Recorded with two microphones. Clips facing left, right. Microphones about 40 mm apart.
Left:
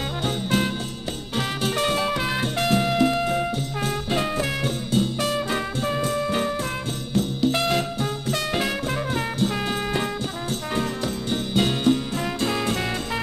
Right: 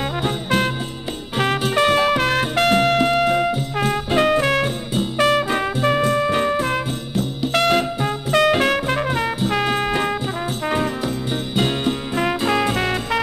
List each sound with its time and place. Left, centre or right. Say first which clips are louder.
1.8 s music: right 8 dB; right
5.4 s music: right 5 dB; right
6.0 s music: right 6 dB; right
7.5 s music: right 5 dB; right
10.7 s music: right 4 dB; centre
12.2 s music: right 6 dB; right
12.7 s music: right 5 dB; right